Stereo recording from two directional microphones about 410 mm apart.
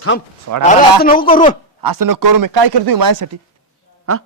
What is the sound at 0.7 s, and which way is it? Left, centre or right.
Speech, centre.